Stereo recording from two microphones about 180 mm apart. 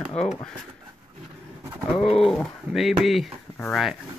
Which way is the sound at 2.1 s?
Centre (ahead or behind).